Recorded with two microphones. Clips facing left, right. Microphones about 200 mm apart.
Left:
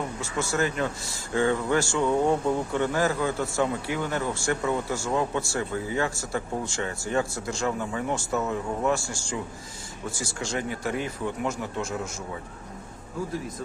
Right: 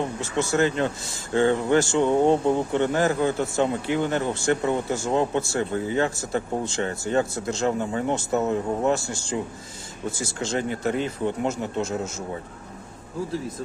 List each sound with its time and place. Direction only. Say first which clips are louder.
0.0 s speech: right 4 dB; 25° right (ahead or behind)